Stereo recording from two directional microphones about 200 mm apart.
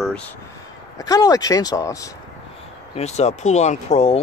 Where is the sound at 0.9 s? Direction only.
15° left (ahead or behind).